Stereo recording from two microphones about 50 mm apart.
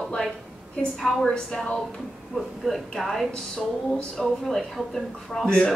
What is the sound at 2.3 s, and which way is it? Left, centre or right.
Speech, centre.